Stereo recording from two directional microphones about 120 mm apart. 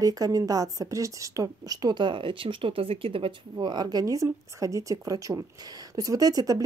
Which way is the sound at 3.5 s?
35° right (ahead or behind).